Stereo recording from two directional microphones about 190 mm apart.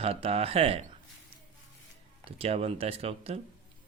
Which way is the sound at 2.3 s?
30° right (ahead or behind).